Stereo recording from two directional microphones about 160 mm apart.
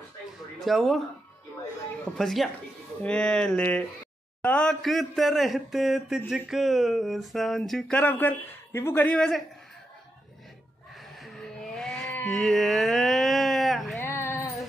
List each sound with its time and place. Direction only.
0.7 s speech: centre (ahead or behind)
2.1 s speech: centre (ahead or behind)
11.2 s vehicle: centre (ahead or behind)
13.9 s a sound: 15° left (ahead or behind)